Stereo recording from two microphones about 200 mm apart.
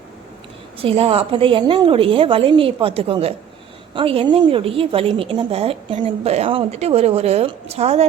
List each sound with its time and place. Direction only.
0.8 s a woman's voice: 30° right (ahead or behind)